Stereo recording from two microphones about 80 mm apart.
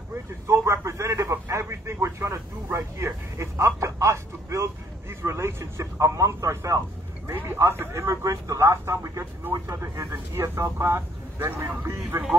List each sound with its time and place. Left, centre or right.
0.1 s speech: right